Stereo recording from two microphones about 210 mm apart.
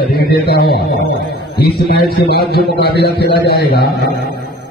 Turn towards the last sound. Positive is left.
turn(degrees=50)  # may be behind; listen again after turning